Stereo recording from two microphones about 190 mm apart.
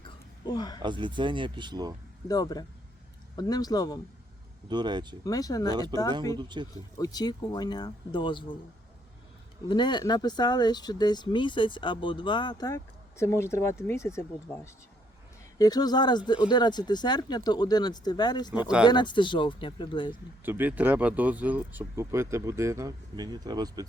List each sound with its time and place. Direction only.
0.4 s speech: 20° left (ahead or behind)
0.8 s speech: 25° right (ahead or behind)
2.2 s speech: 20° left (ahead or behind)
4.7 s speech: 25° right (ahead or behind)
5.2 s speech: 20° left (ahead or behind)
6.3 s speech: 25° right (ahead or behind)
7.0 s speech: 20° left (ahead or behind)
9.6 s speech: 25° left (ahead or behind)
20.4 s speech: 10° right (ahead or behind)